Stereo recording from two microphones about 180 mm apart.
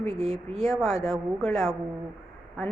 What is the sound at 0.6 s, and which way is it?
A woman's voice, centre (ahead or behind).